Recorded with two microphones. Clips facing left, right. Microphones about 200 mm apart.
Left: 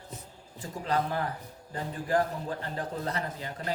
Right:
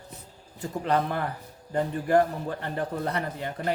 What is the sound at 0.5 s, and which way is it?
A man's voice, 60° right (ahead or behind).